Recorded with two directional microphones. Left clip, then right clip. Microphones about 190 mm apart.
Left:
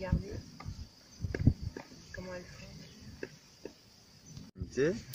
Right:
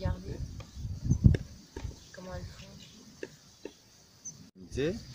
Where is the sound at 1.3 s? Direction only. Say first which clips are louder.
Even; 45° right (ahead or behind).